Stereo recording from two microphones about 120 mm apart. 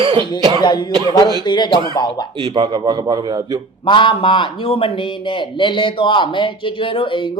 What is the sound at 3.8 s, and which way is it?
Speech, 45° left (ahead or behind).